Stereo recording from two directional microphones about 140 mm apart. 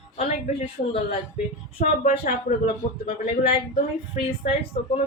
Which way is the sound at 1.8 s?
90° left.